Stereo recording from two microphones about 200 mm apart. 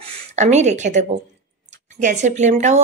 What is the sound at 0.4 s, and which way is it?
A woman's voice, 35° right (ahead or behind).